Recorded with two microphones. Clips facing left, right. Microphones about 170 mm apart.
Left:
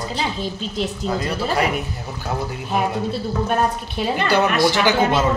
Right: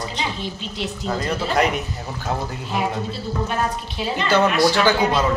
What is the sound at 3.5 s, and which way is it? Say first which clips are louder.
Speech: left 4 dB; 50° left (ahead or behind).